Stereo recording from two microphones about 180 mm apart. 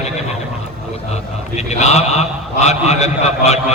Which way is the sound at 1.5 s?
40° left (ahead or behind).